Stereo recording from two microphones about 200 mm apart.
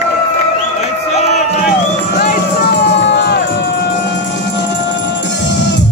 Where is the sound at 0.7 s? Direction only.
35° left (ahead or behind).